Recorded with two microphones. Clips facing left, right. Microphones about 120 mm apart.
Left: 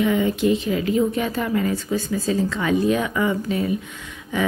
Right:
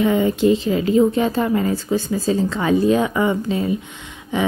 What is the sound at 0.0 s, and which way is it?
Speech, 30° right (ahead or behind).